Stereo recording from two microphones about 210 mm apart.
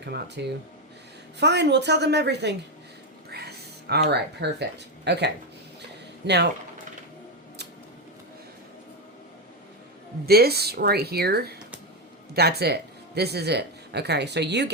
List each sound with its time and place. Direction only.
0.0 s speech: 55° right (ahead or behind)
3.2 s a sound: 50° right (ahead or behind)
4.4 s speech: 55° right (ahead or behind)
10.2 s speech: 50° right (ahead or behind)